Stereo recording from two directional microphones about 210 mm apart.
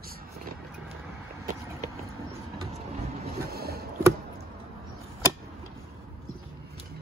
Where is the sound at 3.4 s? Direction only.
50° right (ahead or behind).